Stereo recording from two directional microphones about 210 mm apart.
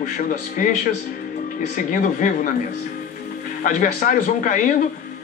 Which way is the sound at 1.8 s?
40° left (ahead or behind).